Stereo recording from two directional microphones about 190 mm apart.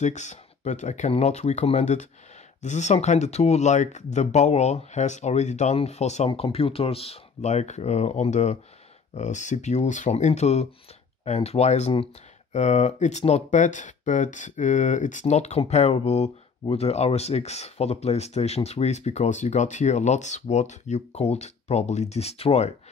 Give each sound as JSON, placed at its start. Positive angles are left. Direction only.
{"t": 0.0, "sound": "speech", "side_deg": 40}